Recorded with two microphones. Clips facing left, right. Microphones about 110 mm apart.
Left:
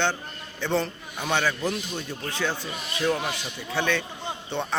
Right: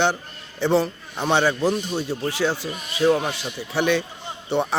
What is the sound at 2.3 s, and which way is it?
Speech, 15° right (ahead or behind).